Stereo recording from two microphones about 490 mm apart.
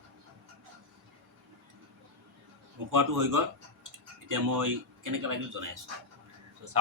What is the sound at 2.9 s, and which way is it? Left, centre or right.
Speech, right.